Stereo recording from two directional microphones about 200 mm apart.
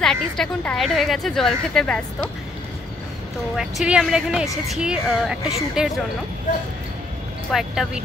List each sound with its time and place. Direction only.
0.0 s a woman's voice: 5° left (ahead or behind)
3.5 s a woman's voice: 5° right (ahead or behind)
7.5 s a woman's voice: centre (ahead or behind)